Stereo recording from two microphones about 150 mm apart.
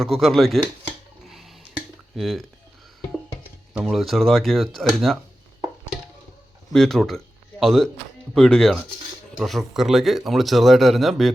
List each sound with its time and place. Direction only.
0.0 s speech: centre (ahead or behind)
2.1 s speech: centre (ahead or behind)
3.8 s speech: centre (ahead or behind)
6.7 s speech: 5° left (ahead or behind)